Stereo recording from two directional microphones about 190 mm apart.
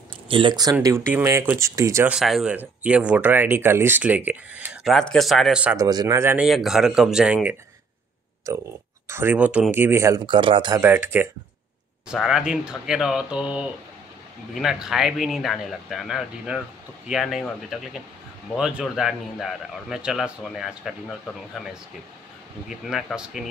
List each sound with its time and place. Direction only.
0.3 s speech: 25° right (ahead or behind)
0.7 s speech: 10° right (ahead or behind)
2.1 s a man's voice: centre (ahead or behind)
5.8 s speech: 20° right (ahead or behind)
6.4 s a man's voice: centre (ahead or behind)
8.5 s speech: 15° right (ahead or behind)
10.8 s a man's voice: 10° right (ahead or behind)
22.7 s a man's voice: centre (ahead or behind)